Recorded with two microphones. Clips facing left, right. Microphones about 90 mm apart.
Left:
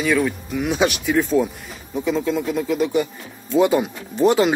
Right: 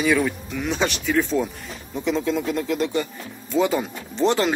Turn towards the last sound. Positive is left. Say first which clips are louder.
# left 4 dB
turn(degrees=10)  # may be behind; listen again after turning